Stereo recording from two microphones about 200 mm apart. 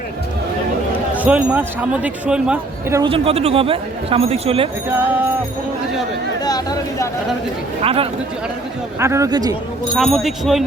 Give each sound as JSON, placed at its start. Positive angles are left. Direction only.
{"t": 1.1, "sound": "a man's voice", "side_deg": -5}
{"t": 3.0, "sound": "speech", "side_deg": -30}
{"t": 4.9, "sound": "a man's voice", "side_deg": -10}
{"t": 6.4, "sound": "speech", "side_deg": 20}
{"t": 7.8, "sound": "speech", "side_deg": -30}
{"t": 9.0, "sound": "a man's voice", "side_deg": -15}
{"t": 9.9, "sound": "speech", "side_deg": 0}